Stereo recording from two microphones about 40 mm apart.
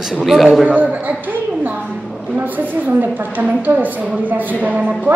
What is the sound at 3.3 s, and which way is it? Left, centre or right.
Speech, right.